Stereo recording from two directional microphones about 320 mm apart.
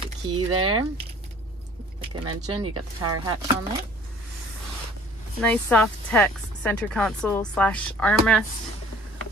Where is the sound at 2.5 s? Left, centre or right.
Right.